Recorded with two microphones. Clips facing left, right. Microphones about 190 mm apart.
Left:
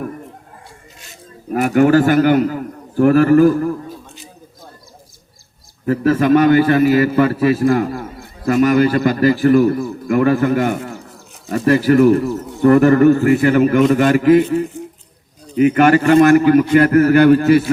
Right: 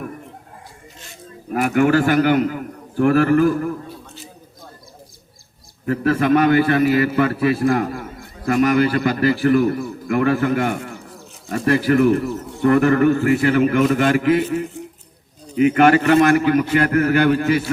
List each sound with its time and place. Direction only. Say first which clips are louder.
1.5 s a man's voice: left 4 dB; 35° left (ahead or behind)
5.8 s a man's voice: left 4 dB; 35° left (ahead or behind)